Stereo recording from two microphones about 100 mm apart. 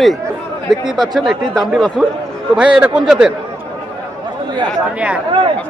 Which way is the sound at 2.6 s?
10° right (ahead or behind).